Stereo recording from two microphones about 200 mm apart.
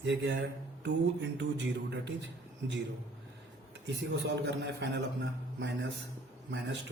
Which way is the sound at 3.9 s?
60° right (ahead or behind).